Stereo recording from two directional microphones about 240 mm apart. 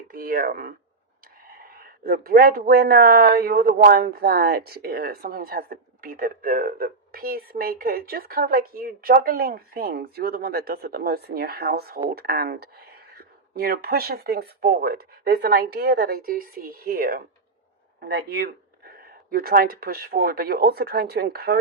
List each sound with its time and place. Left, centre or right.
0.1 s a man's voice: right